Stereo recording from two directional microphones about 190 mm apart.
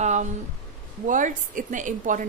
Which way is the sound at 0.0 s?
40° right (ahead or behind).